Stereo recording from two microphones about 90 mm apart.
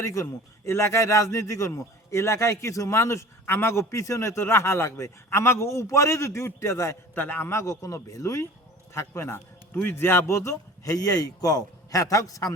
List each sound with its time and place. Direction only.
0.0 s a man's voice: 35° left (ahead or behind)
10.3 s a man's voice: 35° left (ahead or behind)